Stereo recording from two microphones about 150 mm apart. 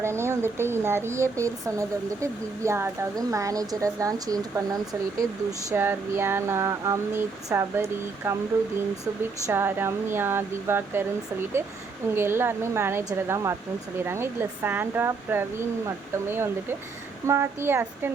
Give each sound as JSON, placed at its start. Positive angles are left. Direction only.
{"t": 0.0, "sound": "speech", "side_deg": -15}
{"t": 9.5, "sound": "speech", "side_deg": -15}
{"t": 12.1, "sound": "speech", "side_deg": -15}